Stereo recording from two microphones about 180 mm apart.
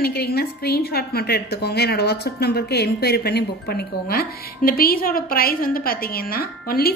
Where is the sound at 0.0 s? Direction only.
60° left (ahead or behind).